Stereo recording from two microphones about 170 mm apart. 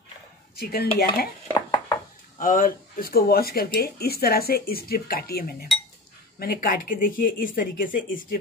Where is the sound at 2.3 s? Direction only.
50° left (ahead or behind).